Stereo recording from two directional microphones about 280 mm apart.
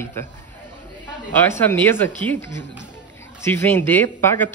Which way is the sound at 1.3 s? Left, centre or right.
Centre.